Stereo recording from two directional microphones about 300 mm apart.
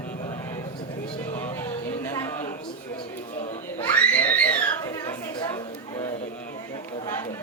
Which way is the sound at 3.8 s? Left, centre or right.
Centre.